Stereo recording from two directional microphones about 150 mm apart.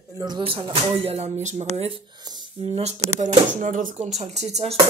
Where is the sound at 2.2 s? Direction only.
25° right (ahead or behind).